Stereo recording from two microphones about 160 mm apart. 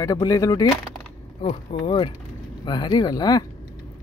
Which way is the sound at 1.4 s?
30° left (ahead or behind).